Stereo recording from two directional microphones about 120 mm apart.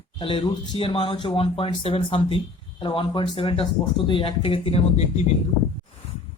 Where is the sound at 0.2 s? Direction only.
45° left (ahead or behind); by 5.2 s 60° left (ahead or behind).